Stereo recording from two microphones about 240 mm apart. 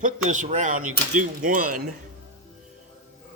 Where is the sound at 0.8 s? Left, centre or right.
Right.